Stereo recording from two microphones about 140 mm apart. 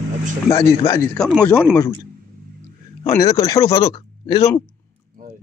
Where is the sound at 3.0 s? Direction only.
25° left (ahead or behind).